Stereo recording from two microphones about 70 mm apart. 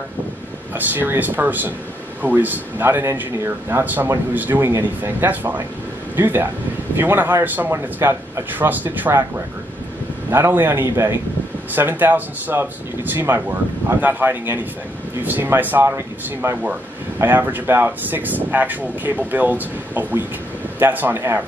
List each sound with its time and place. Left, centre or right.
0.7 s speech: right
7.7 s speech: right
8.5 s speech: right
10.3 s speech: right